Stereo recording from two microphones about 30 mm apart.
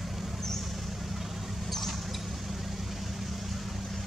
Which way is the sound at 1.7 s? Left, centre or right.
Centre.